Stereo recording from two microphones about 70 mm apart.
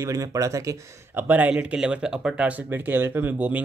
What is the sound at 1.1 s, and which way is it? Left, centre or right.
Speech, right.